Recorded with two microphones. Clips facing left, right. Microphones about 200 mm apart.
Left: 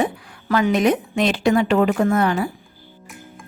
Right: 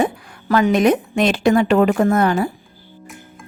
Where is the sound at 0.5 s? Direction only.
50° right (ahead or behind).